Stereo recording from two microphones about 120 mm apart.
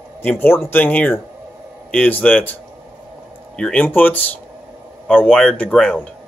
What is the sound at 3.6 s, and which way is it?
Speech, 10° left (ahead or behind).